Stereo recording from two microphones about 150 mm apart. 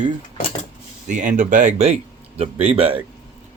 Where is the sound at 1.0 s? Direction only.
55° right (ahead or behind); by 3.0 s 40° right (ahead or behind).